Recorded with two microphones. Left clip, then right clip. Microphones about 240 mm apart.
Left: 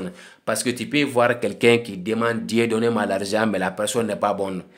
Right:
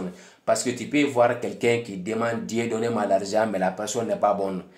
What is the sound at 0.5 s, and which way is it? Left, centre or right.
Speech, left.